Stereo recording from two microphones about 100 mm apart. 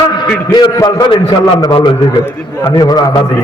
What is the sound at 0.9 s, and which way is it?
A man's voice, 50° left (ahead or behind).